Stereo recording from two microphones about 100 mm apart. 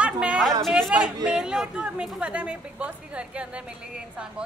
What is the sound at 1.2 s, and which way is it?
A woman's voice, 5° right (ahead or behind).